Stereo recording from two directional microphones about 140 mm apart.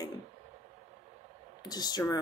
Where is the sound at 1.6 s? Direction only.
30° left (ahead or behind).